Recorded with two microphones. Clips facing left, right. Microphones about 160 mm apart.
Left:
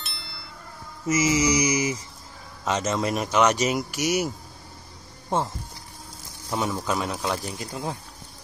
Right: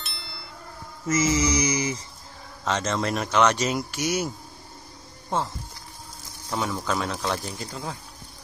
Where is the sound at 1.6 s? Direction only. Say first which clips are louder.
Left 2 dB; 15° left (ahead or behind).